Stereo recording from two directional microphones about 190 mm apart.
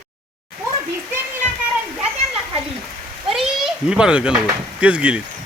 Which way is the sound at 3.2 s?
Centre (ahead or behind).